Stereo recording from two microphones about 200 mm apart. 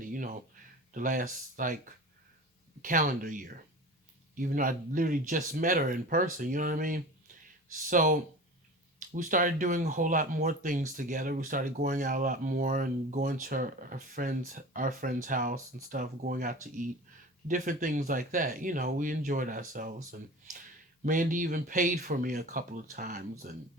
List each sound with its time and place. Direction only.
0.0 s a sound: 40° right (ahead or behind)
0.9 s speech: 40° right (ahead or behind)
2.8 s speech: 40° right (ahead or behind)
21.0 s speech: 40° right (ahead or behind)